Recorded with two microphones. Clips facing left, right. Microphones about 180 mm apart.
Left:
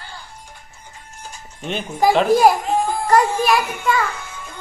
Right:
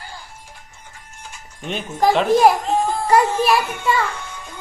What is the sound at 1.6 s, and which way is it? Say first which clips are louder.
A man's voice: left 1 dB; centre (ahead or behind).